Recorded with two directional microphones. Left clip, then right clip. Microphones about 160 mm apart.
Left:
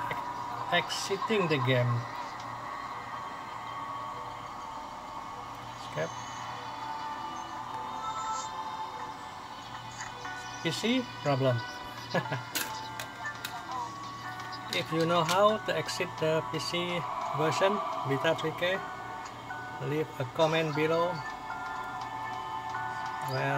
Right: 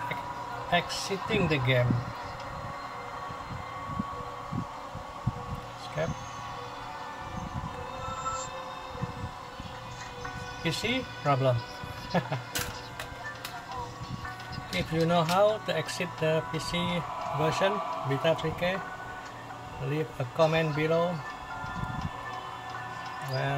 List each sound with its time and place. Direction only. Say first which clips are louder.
0.7 s speech: right 1 dB; 10° left (ahead or behind)
10.6 s speech: even; 10° left (ahead or behind)
15.0 s speech: right 1 dB; 15° left (ahead or behind)
19.9 s speech: even; 15° left (ahead or behind)